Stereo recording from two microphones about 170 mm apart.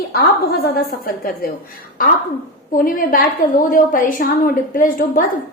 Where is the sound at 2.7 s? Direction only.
55° left (ahead or behind).